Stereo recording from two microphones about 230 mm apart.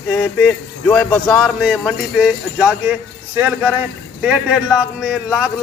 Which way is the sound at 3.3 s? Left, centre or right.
Centre.